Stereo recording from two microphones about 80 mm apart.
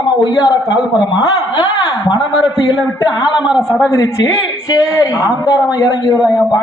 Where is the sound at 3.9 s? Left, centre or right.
Left.